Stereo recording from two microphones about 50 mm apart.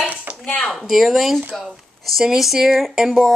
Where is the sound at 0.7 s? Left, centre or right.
Centre.